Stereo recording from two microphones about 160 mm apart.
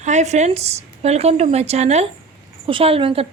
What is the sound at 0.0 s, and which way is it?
A woman's voice, 45° right (ahead or behind).